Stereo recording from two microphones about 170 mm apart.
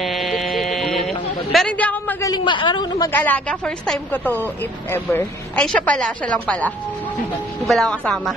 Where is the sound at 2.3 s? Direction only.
30° left (ahead or behind).